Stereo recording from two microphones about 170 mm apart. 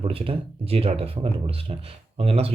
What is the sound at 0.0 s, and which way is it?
Speech, 35° right (ahead or behind).